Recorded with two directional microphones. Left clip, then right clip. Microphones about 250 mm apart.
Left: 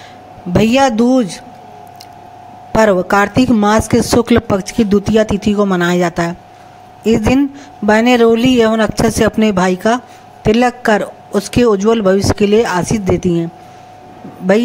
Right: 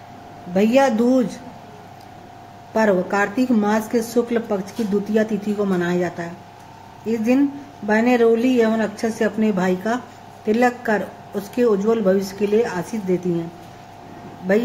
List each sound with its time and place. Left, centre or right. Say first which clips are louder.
0.5 s speech: left 5 dB; left
2.7 s speech: left 8 dB; left